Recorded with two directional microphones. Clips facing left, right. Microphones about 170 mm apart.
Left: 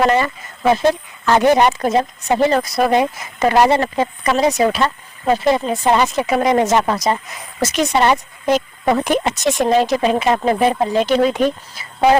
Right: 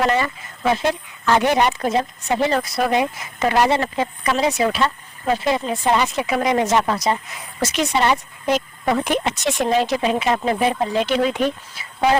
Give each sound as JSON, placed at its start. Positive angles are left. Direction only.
{"t": 0.0, "sound": "speech", "side_deg": 40}